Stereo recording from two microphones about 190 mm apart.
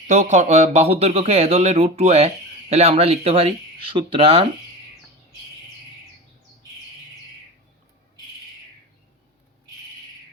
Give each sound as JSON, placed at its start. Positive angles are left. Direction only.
{"t": 0.1, "sound": "speech", "side_deg": -40}